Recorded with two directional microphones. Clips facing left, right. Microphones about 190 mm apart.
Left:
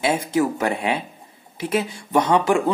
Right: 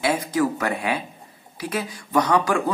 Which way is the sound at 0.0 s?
25° left (ahead or behind).